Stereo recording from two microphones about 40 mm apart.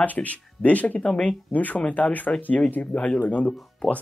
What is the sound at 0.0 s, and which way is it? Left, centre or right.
Speech, left.